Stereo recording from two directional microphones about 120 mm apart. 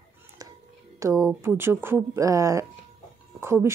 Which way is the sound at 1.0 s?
25° right (ahead or behind).